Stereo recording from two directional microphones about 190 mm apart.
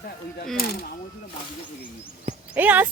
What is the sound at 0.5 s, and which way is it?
Speech, 50° left (ahead or behind).